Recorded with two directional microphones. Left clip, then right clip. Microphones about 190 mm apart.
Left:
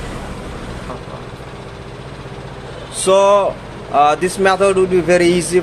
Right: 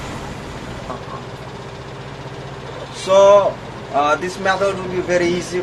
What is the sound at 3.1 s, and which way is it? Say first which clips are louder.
Speech: right 1 dB; 60° left (ahead or behind).